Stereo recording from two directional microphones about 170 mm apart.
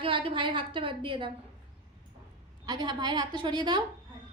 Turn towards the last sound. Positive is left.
turn(degrees=-25)  # may be behind; listen again after turning